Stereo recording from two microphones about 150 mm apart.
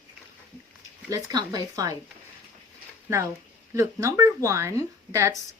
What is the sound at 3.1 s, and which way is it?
A woman's voice, 20° right (ahead or behind).